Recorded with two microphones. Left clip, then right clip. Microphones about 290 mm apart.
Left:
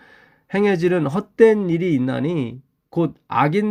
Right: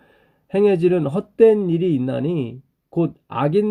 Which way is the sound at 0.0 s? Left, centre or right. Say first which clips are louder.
Left 6 dB; left.